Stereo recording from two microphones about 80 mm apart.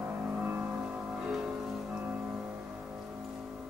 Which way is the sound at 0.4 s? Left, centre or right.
Centre.